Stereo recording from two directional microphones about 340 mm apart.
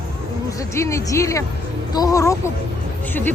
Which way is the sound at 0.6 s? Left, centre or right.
Centre.